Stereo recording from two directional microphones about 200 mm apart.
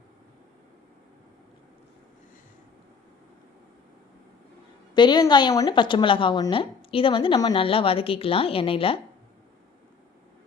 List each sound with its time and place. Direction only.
4.9 s a woman's voice: 20° left (ahead or behind)